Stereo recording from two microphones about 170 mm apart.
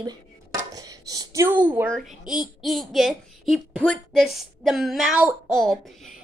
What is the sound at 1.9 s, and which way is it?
A woman's voice, centre (ahead or behind).